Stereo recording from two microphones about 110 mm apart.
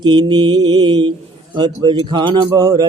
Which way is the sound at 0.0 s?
45° right (ahead or behind).